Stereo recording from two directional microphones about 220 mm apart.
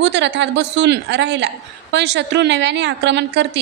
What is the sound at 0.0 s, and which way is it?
A woman's voice, 55° right (ahead or behind).